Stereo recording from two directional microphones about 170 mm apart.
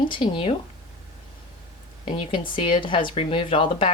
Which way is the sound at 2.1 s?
30° left (ahead or behind).